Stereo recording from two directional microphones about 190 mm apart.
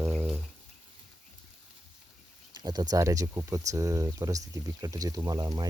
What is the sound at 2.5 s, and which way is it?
Speech, 20° right (ahead or behind).